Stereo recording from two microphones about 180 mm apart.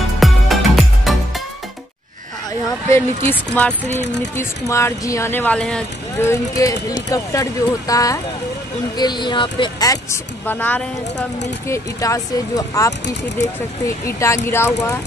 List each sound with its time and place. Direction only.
0.2 s music: centre (ahead or behind)
3.3 s speech: 10° left (ahead or behind)
6.1 s speech: 15° left (ahead or behind)
10.4 s speech: 10° left (ahead or behind)